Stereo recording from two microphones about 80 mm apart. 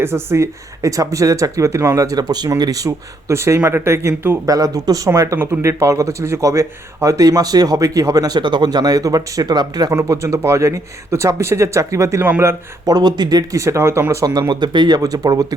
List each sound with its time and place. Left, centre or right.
0.0 s a man's voice: right
4.4 s a man's voice: right
8.4 s speech: right
10.0 s speech: right
12.8 s speech: right
13.5 s speech: right
14.5 s speech: right